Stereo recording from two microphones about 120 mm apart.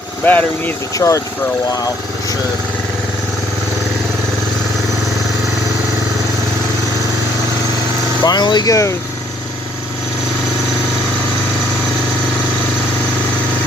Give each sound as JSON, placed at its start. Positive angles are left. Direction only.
{"t": 0.3, "sound": "speech", "side_deg": 15}
{"t": 0.9, "sound": "speech", "side_deg": 25}
{"t": 8.2, "sound": "speech", "side_deg": 35}